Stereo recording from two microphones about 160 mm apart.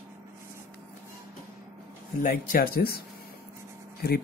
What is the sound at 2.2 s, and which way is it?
Speech, 65° left (ahead or behind).